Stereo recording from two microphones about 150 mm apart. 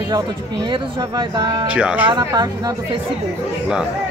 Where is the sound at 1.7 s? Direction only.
10° right (ahead or behind).